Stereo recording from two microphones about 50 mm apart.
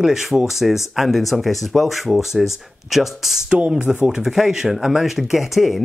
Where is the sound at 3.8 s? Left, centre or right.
Right.